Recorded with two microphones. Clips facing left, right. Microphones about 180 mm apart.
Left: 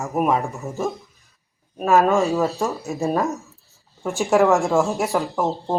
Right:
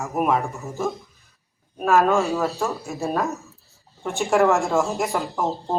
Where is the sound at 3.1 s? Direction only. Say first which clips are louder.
Even; 15° left (ahead or behind).